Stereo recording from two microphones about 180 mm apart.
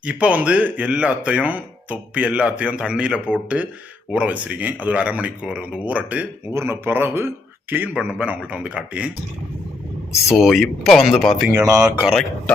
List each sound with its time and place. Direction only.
0.0 s speech: 5° right (ahead or behind)
10.3 s speech: centre (ahead or behind)
11.5 s speech: 15° right (ahead or behind)
12.0 s speech: centre (ahead or behind)